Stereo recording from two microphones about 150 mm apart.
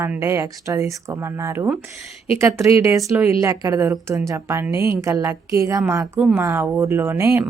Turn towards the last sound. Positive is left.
turn(degrees=-15)  # may be behind; listen again after turning